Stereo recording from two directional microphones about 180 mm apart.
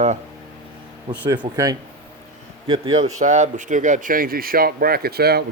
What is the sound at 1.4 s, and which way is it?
A man's voice, 20° right (ahead or behind).